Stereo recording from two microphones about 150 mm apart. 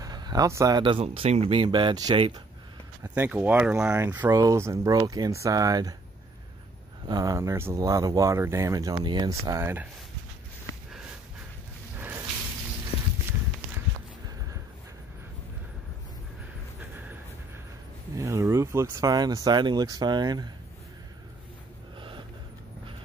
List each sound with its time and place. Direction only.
0.0 s speech: 25° right (ahead or behind)
3.2 s speech: 10° right (ahead or behind)
3.9 s speech: 15° right (ahead or behind)
7.1 s speech: 25° right (ahead or behind)
12.0 s drip: 15° right (ahead or behind)
18.1 s speech: 20° right (ahead or behind)